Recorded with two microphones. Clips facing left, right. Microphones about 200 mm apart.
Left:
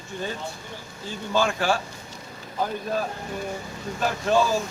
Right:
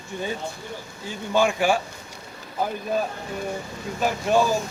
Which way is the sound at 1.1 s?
10° right (ahead or behind).